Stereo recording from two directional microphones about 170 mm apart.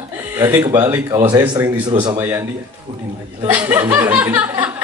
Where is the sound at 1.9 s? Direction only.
25° right (ahead or behind).